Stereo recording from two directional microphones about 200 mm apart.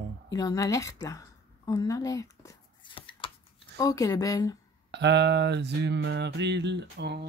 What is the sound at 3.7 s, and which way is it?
Speech, 15° left (ahead or behind).